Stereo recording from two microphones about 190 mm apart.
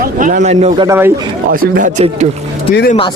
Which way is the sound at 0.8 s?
15° right (ahead or behind).